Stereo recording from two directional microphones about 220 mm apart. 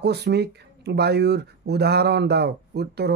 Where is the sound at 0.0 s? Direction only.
50° right (ahead or behind).